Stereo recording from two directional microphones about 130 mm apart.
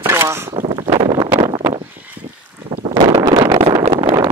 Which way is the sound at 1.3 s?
40° right (ahead or behind).